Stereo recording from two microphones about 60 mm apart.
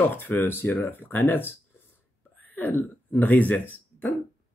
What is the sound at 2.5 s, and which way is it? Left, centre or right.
Speech, left.